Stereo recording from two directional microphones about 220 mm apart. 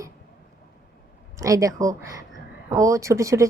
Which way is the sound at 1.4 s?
15° right (ahead or behind).